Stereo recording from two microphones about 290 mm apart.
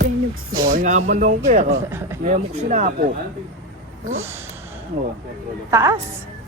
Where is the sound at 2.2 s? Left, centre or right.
Right.